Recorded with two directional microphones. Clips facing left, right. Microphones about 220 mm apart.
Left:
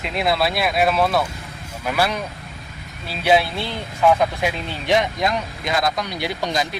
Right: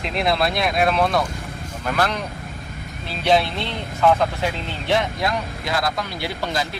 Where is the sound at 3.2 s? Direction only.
5° left (ahead or behind).